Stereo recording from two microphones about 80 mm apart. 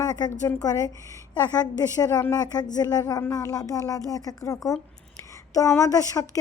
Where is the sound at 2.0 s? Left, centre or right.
Left.